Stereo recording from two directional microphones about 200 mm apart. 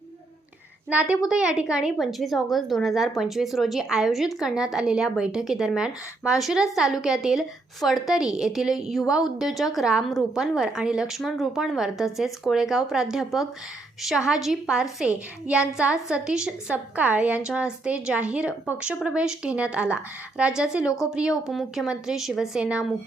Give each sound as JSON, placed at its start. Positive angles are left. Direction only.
{"t": 0.9, "sound": "a woman's voice", "side_deg": -5}